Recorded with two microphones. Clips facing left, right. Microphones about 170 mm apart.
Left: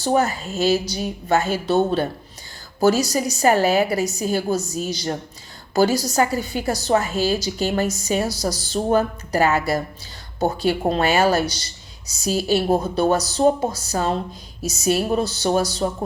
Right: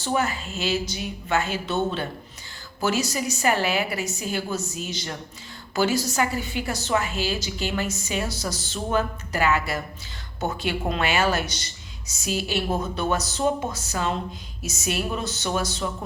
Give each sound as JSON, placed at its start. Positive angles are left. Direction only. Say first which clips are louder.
{"t": 0.0, "sound": "a woman's voice", "louder": "left 6 dB", "side_deg": 40}